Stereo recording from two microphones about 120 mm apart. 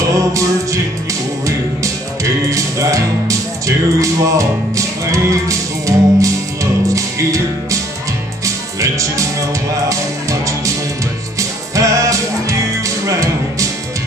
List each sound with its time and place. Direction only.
0.2 s music: 25° right (ahead or behind)
2.5 s music: 25° right (ahead or behind)
11.3 s music: 25° right (ahead or behind)